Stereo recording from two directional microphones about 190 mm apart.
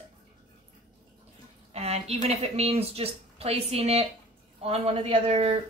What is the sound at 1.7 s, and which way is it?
A woman's voice, 35° right (ahead or behind).